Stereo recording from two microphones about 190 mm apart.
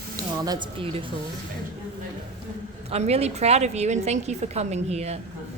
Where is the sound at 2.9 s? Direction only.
35° right (ahead or behind).